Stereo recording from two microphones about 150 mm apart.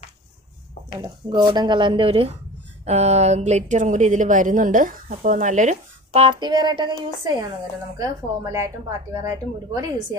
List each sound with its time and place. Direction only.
1.0 s speech: 30° right (ahead or behind)
8.0 s speech: 20° right (ahead or behind)